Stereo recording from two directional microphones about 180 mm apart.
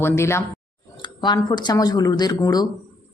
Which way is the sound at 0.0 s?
15° left (ahead or behind).